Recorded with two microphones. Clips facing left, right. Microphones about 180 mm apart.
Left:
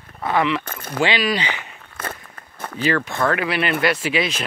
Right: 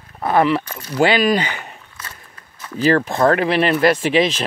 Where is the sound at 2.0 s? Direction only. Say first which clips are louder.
Left 8 dB; 55° left (ahead or behind).